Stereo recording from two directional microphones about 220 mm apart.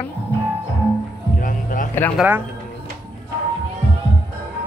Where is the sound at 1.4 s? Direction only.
40° left (ahead or behind).